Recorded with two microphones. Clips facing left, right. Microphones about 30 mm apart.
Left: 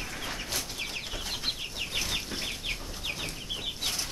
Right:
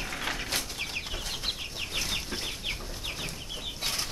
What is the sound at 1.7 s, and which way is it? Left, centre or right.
Chicken, centre.